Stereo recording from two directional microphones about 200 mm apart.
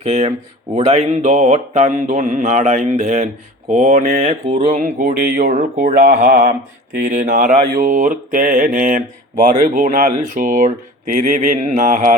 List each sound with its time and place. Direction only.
0.0 s mantra: 30° right (ahead or behind)